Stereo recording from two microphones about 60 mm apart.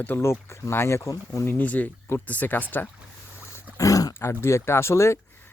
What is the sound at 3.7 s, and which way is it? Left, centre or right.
Dog, left.